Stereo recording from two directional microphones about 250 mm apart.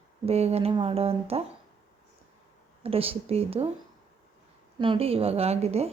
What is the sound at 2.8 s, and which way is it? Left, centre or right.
Speech, right.